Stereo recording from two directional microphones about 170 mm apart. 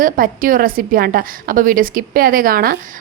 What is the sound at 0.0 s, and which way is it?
A woman's voice, 55° right (ahead or behind).